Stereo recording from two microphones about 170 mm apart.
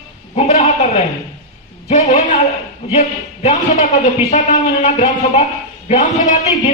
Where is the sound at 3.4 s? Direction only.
40° left (ahead or behind).